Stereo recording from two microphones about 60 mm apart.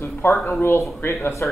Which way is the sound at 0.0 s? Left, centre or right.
Left.